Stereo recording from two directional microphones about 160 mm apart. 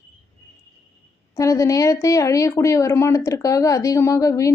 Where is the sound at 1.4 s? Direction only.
20° left (ahead or behind).